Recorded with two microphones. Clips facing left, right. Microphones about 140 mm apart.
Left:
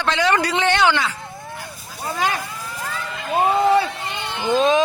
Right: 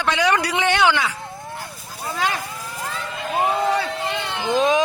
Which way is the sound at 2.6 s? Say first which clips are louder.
Even; 15° right (ahead or behind).